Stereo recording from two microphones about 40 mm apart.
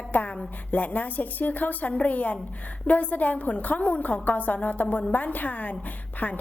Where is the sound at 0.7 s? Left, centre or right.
Left.